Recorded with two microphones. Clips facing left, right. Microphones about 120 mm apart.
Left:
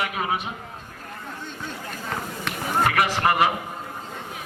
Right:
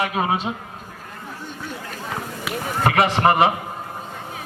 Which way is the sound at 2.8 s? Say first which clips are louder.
Right 6 dB; 25° right (ahead or behind).